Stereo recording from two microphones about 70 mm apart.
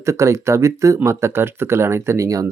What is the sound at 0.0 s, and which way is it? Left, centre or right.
Speech, right.